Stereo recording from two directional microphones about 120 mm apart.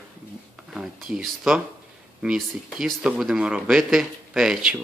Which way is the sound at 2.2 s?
Centre (ahead or behind).